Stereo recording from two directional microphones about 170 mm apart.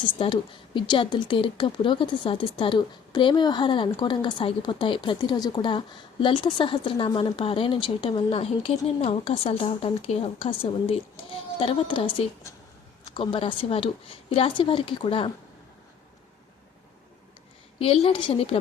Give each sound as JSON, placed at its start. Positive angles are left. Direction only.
{"t": 0.2, "sound": "speech", "side_deg": 30}
{"t": 17.7, "sound": "speech", "side_deg": 35}